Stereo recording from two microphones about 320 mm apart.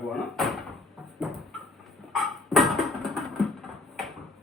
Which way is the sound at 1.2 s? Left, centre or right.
Centre.